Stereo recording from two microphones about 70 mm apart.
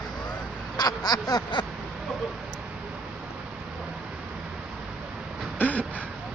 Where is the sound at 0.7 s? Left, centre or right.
Left.